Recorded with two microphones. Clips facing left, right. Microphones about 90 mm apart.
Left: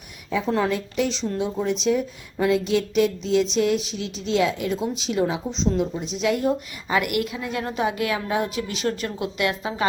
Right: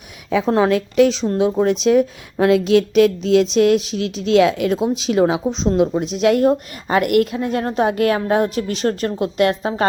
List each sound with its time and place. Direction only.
0.3 s a woman's voice: 75° right (ahead or behind); by 1.4 s 55° right (ahead or behind)
1.4 s a woman's voice: 80° right; by 9.8 s 45° right (ahead or behind)